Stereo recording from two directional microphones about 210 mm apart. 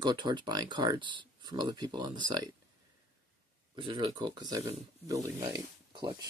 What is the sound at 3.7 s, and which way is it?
Speech, 25° right (ahead or behind).